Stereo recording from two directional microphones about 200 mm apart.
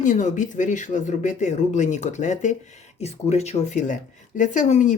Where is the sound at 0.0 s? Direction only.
40° left (ahead or behind).